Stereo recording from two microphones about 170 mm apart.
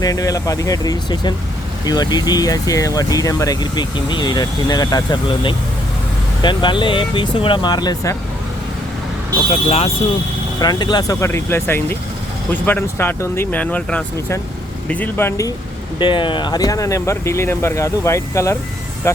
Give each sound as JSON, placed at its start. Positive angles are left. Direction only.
{"t": 0.0, "sound": "speech", "side_deg": 20}
{"t": 9.5, "sound": "speech", "side_deg": 35}
{"t": 10.6, "sound": "speech", "side_deg": 25}
{"t": 16.0, "sound": "speech", "side_deg": 30}